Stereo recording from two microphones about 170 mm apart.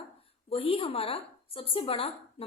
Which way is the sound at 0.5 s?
35° left (ahead or behind).